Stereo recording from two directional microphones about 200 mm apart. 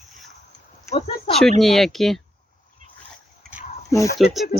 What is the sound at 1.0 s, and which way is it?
Speech, 30° left (ahead or behind).